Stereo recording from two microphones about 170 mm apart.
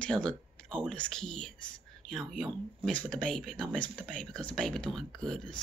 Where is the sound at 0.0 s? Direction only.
5° left (ahead or behind).